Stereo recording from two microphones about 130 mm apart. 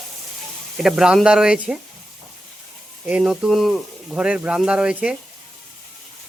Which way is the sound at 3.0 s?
5° right (ahead or behind).